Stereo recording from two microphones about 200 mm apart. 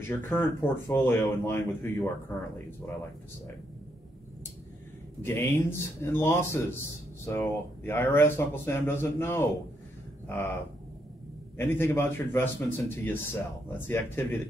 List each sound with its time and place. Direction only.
0.1 s a man's voice: 10° left (ahead or behind)
5.2 s a man's voice: 10° left (ahead or behind)
11.5 s a man's voice: 10° left (ahead or behind)